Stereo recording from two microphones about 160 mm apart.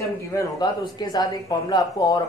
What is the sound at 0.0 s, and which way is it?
A man's voice, 20° left (ahead or behind).